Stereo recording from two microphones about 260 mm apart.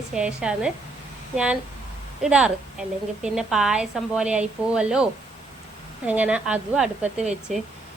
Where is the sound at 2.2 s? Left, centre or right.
Centre.